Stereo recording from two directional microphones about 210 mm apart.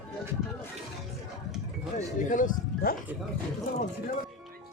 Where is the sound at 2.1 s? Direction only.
40° left (ahead or behind).